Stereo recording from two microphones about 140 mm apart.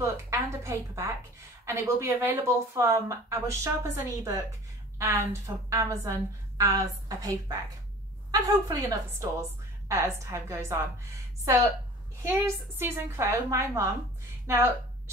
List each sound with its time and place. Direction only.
0.0 s a woman's voice: 20° right (ahead or behind)